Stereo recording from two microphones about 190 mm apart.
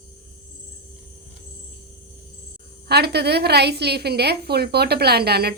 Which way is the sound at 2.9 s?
60° right (ahead or behind).